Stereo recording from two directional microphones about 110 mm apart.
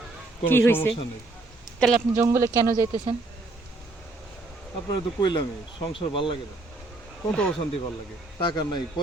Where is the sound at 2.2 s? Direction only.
30° right (ahead or behind).